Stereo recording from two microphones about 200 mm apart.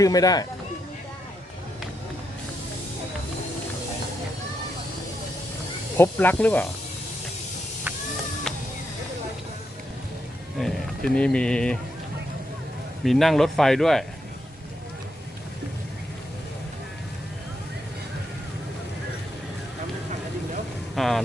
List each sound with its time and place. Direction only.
0.0 s speech: 20° left (ahead or behind)
6.0 s speech: 10° left (ahead or behind)
10.6 s speech: centre (ahead or behind)
13.1 s speech: centre (ahead or behind)
20.9 s vehicle: centre (ahead or behind)